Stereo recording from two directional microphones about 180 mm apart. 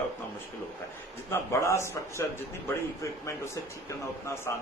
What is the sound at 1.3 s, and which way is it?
Speech, 15° left (ahead or behind).